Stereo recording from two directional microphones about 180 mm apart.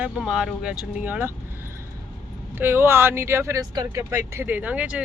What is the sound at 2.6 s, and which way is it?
Speech, 10° right (ahead or behind).